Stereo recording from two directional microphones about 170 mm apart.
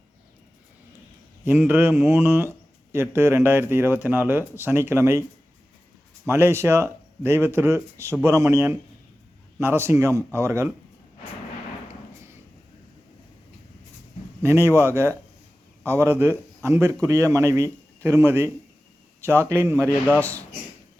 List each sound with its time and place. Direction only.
1.5 s speech: 10° right (ahead or behind)
6.2 s speech: 15° right (ahead or behind)
14.4 s speech: 15° right (ahead or behind)
20.1 s a man's voice: 10° left (ahead or behind)